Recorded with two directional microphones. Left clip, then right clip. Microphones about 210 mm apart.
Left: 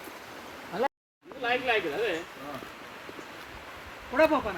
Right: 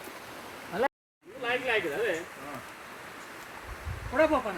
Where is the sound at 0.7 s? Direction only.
25° right (ahead or behind).